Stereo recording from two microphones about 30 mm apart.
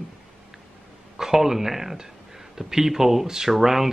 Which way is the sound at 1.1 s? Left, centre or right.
Centre.